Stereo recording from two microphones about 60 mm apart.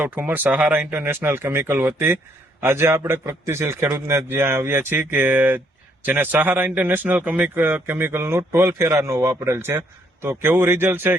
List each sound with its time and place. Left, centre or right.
0.0 s a man's voice: right